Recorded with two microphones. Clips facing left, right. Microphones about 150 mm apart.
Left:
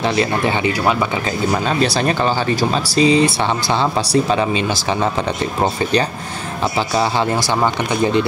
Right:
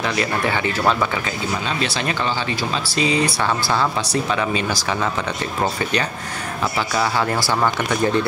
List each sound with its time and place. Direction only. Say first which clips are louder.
0.0 s speech: left 4 dB; 30° left (ahead or behind)
1.5 s speech: left 7 dB; 40° left (ahead or behind)
7.0 s speech: left 2 dB; 25° left (ahead or behind)